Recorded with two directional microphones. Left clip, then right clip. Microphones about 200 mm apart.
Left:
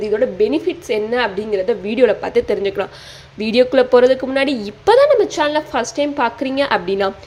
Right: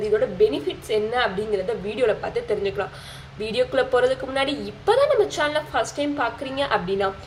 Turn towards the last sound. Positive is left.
turn(degrees=45)  # may be behind; listen again after turning